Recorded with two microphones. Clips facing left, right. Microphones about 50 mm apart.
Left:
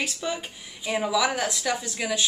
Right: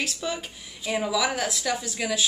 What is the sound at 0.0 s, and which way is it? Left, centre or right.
A woman's voice, centre.